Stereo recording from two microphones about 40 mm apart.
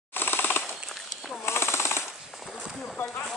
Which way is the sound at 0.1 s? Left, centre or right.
Left.